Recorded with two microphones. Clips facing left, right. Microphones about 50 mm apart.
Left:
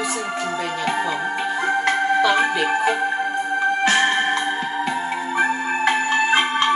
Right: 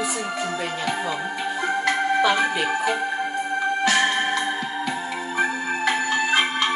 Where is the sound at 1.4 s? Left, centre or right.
Left.